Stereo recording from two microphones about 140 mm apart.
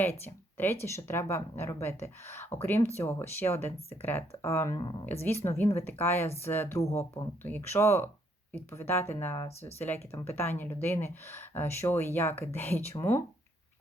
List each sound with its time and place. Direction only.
0.0 s a woman's voice: 15° left (ahead or behind)
4.8 s speech: 35° left (ahead or behind)
5.5 s a woman's voice: 20° left (ahead or behind)